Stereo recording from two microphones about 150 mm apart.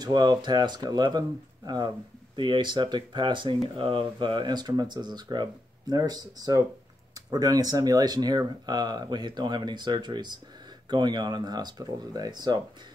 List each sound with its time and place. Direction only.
0.0 s speech: 30° right (ahead or behind)
2.3 s speech: 30° right (ahead or behind)